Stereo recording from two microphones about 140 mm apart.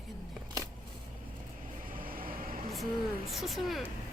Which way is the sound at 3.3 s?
Centre (ahead or behind).